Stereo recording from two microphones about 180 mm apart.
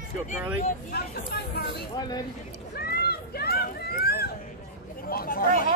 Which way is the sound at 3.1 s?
60° left (ahead or behind).